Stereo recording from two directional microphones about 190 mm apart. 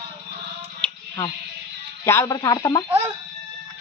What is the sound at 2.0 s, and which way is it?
Speech, 15° left (ahead or behind).